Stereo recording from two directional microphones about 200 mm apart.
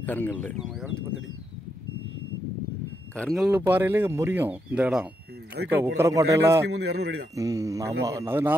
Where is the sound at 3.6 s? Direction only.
10° right (ahead or behind).